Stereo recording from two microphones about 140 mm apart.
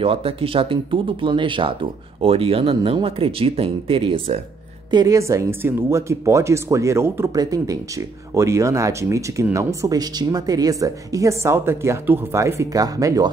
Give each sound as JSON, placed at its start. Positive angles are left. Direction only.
{"t": 0.0, "sound": "speech", "side_deg": -40}
{"t": 4.9, "sound": "speech", "side_deg": -25}